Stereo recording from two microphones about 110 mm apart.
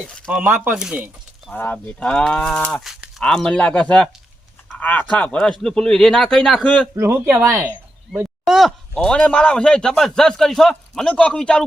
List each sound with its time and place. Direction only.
0.3 s speech: 15° right (ahead or behind)
1.5 s speech: 15° left (ahead or behind)
2.7 s a man's voice: 5° right (ahead or behind)
6.9 s speech: 25° right (ahead or behind)
8.4 s speech: centre (ahead or behind)